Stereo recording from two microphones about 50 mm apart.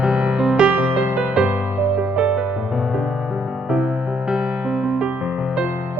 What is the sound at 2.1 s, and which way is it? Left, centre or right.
Music, centre.